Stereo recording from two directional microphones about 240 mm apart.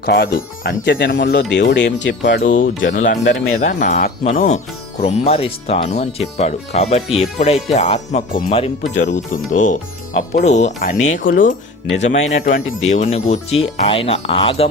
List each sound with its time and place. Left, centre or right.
0.0 s speech: left
2.9 s speech: left